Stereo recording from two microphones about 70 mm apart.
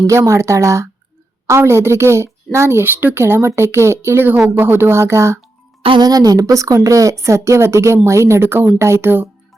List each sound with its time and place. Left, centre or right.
0.1 s a woman's voice: right
6.0 s a woman's voice: right